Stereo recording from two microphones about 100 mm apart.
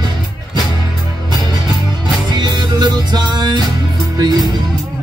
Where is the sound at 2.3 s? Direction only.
45° right (ahead or behind).